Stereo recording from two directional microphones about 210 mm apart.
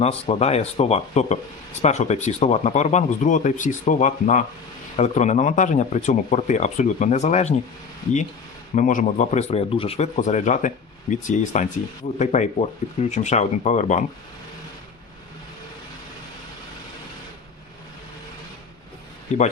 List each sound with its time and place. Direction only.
0.0 s speech: 30° left (ahead or behind)
8.7 s speech: 40° left (ahead or behind)
19.3 s speech: 30° left (ahead or behind)